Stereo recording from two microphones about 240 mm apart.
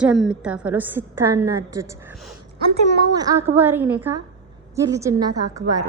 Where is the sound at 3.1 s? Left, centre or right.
Centre.